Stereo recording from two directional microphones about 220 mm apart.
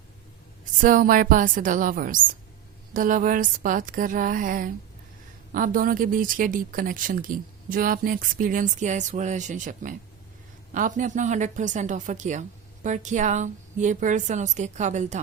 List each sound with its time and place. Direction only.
0.6 s speech: 35° right (ahead or behind)